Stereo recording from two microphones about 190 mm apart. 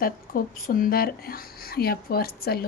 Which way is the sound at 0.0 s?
50° left (ahead or behind).